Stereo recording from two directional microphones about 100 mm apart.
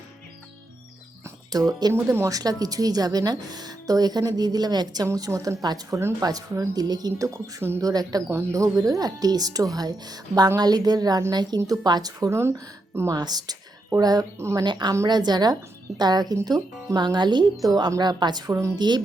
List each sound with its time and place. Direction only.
1.5 s speech: 40° right (ahead or behind)
1.9 s a woman's voice: 30° right (ahead or behind)
13.1 s a woman's voice: 40° right (ahead or behind)
14.3 s speech: 25° right (ahead or behind)
14.6 s speech: 45° right (ahead or behind)